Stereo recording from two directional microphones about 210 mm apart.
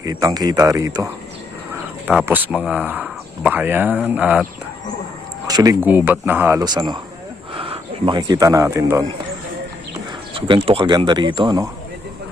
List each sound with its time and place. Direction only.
0.0 s speech: 15° right (ahead or behind)
2.0 s speech: 10° right (ahead or behind)
5.5 s speech: 15° right (ahead or behind)
10.3 s speech: 25° right (ahead or behind)